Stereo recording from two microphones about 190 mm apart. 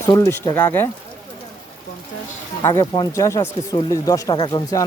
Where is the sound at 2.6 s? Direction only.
20° left (ahead or behind).